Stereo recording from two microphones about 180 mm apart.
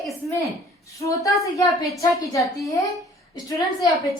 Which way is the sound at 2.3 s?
15° left (ahead or behind).